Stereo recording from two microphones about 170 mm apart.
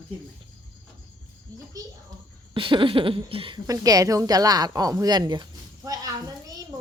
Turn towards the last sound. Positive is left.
turn(degrees=-20)  # may be behind; listen again after turning